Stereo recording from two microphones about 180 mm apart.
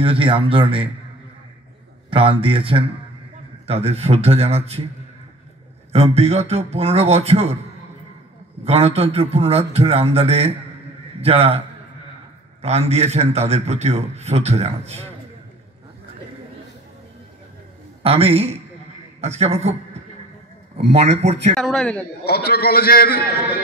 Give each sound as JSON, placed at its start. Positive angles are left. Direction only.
{"t": 0.0, "sound": "a man's voice", "side_deg": -30}
{"t": 2.0, "sound": "a man's voice", "side_deg": -30}
{"t": 5.9, "sound": "a man's voice", "side_deg": -35}
{"t": 8.6, "sound": "a man's voice", "side_deg": -35}
{"t": 12.6, "sound": "a man's voice", "side_deg": -35}
{"t": 18.0, "sound": "a man's voice", "side_deg": -35}
{"t": 21.5, "sound": "a man's voice", "side_deg": 5}
{"t": 22.2, "sound": "a man's voice", "side_deg": 60}